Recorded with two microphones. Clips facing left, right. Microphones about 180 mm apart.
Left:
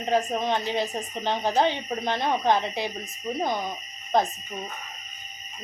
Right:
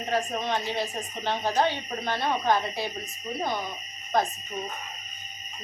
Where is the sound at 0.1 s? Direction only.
20° left (ahead or behind).